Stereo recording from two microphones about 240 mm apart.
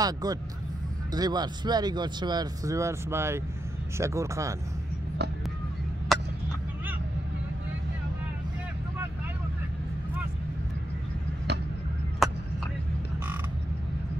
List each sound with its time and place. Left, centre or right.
0.0 s speech: centre
6.1 s a sound: centre
12.2 s vehicle: centre